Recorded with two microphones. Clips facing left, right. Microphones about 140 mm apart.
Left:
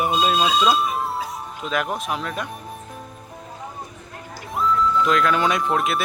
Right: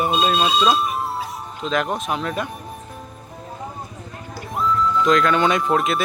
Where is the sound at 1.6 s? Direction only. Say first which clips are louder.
Right 3 dB; 5° left (ahead or behind).